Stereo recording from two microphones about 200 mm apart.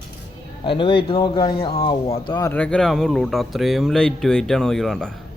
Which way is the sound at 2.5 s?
5° left (ahead or behind).